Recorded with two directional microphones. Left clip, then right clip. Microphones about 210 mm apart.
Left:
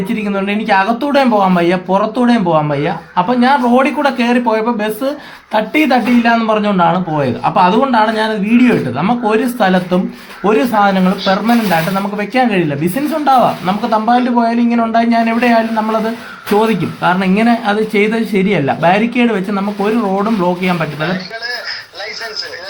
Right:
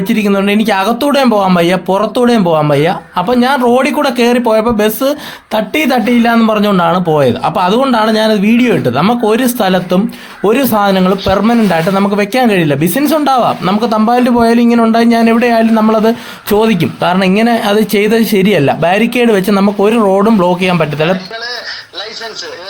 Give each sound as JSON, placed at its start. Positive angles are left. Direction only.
{"t": 0.1, "sound": "speech", "side_deg": -45}